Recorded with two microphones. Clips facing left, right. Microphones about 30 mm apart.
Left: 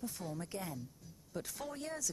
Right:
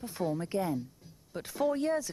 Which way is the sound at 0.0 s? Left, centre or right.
Right.